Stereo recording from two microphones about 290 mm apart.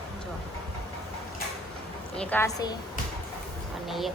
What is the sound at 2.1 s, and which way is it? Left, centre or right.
Speech, centre.